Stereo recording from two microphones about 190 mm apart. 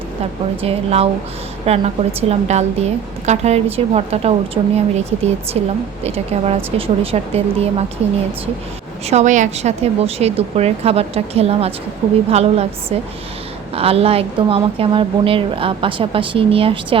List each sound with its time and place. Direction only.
0.6 s a woman's voice: 30° right (ahead or behind)
9.0 s a woman's voice: 40° right (ahead or behind)
13.7 s a woman's voice: 30° right (ahead or behind)